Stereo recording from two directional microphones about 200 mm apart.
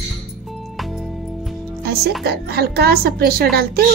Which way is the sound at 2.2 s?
50° right (ahead or behind).